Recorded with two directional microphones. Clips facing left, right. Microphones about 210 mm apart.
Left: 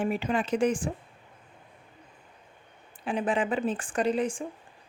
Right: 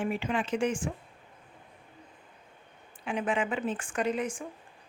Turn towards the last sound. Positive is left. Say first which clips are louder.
# left 3 dB
turn(degrees=30)  # may be behind; listen again after turning